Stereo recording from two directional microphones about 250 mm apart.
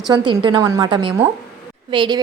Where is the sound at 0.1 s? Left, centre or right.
Centre.